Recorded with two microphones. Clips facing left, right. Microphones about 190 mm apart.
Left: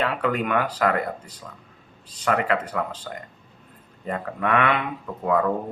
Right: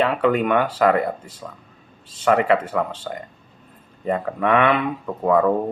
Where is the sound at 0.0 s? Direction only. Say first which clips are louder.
Right 5 dB; 30° right (ahead or behind).